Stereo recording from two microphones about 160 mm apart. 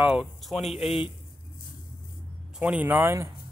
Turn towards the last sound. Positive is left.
turn(degrees=-15)  # may be behind; listen again after turning